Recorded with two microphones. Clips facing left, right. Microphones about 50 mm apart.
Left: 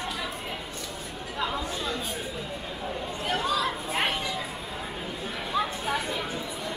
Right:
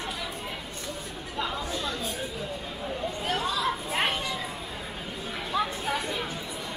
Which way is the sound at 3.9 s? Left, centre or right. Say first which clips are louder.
Left 1 dB; centre.